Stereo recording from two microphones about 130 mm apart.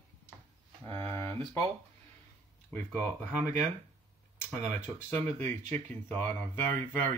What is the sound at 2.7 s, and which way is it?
Speech, 15° left (ahead or behind).